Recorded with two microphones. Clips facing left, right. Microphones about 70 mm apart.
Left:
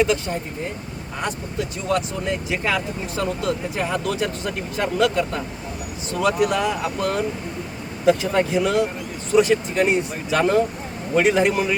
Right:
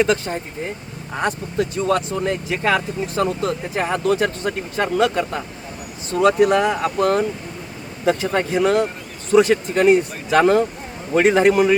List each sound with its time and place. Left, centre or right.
0.0 s speech: right